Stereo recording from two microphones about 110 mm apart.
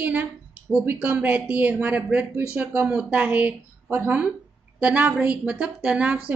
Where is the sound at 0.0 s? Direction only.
15° right (ahead or behind).